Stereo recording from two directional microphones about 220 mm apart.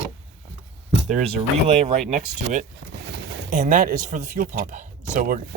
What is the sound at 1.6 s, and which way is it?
Speech, 30° right (ahead or behind).